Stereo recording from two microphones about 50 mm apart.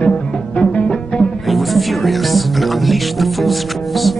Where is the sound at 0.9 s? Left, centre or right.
Centre.